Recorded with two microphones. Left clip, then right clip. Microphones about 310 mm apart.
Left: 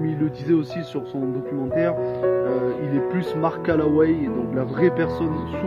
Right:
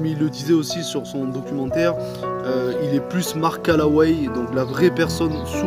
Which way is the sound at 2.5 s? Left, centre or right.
Centre.